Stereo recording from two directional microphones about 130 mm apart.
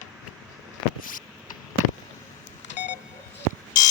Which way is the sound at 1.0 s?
90° left.